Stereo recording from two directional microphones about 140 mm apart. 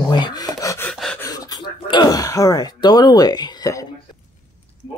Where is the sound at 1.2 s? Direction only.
25° left (ahead or behind).